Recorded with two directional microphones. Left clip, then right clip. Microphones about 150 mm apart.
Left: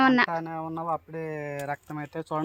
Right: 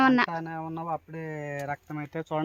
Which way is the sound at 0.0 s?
Centre (ahead or behind).